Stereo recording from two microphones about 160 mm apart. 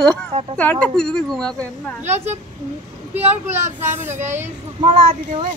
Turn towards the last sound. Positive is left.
turn(degrees=-35)  # may be behind; listen again after turning